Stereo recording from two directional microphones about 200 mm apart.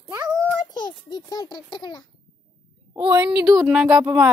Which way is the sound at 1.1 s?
20° left (ahead or behind).